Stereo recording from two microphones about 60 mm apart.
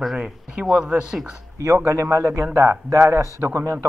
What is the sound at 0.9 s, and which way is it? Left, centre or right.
Speech, centre.